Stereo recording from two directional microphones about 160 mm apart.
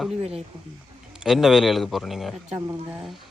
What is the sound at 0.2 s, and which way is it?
Speech, 40° right (ahead or behind).